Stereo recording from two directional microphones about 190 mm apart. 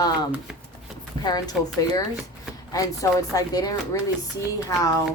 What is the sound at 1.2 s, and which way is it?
Speech, 20° left (ahead or behind).